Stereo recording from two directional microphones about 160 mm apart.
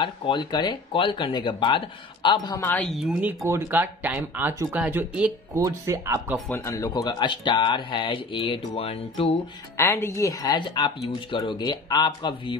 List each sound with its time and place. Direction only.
0.0 s speech: 30° left (ahead or behind)
2.6 s a woman's voice: 10° left (ahead or behind)
2.9 s speech: 5° right (ahead or behind)
5.5 s speech: 20° right (ahead or behind)
6.5 s speech: 15° left (ahead or behind); by 9.4 s 35° left (ahead or behind)
9.8 s speech: 15° left (ahead or behind)